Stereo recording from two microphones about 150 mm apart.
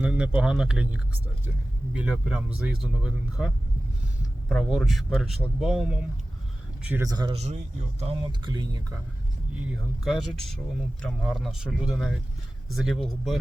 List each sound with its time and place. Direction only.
0.0 s a man's voice: 5° right (ahead or behind)
7.1 s speech: 25° right (ahead or behind)
7.3 s speech: 45° right (ahead or behind)
8.2 s speech: 30° right (ahead or behind)
10.0 s a man's voice: centre (ahead or behind)